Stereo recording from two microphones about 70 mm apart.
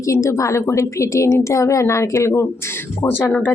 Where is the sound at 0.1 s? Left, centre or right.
Left.